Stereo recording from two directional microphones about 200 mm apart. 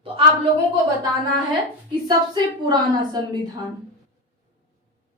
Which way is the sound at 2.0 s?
20° right (ahead or behind).